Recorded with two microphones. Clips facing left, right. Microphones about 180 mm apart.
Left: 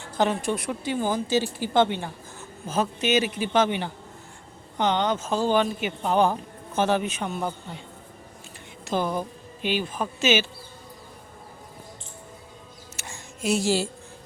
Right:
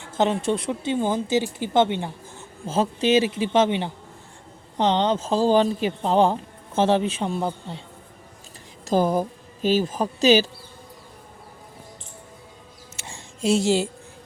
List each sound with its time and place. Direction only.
0.0 s speech: 20° right (ahead or behind)
8.8 s speech: 40° right (ahead or behind)
13.1 s a sound: 25° right (ahead or behind)